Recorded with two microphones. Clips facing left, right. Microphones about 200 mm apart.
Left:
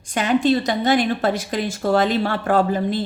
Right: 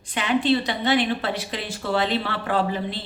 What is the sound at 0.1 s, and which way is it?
Speech, 45° left (ahead or behind).